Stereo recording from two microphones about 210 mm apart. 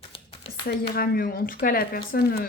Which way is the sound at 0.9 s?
45° left (ahead or behind).